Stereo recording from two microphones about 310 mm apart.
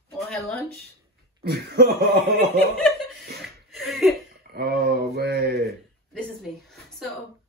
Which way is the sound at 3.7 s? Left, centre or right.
Centre.